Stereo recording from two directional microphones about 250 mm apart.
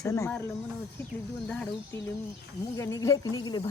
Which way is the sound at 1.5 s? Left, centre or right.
Centre.